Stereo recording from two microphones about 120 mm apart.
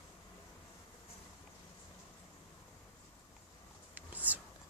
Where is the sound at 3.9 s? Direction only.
15° right (ahead or behind).